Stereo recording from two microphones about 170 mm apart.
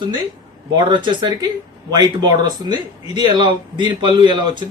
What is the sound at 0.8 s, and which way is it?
Speech, 25° right (ahead or behind).